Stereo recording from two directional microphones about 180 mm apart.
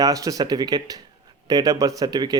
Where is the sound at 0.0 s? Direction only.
20° right (ahead or behind).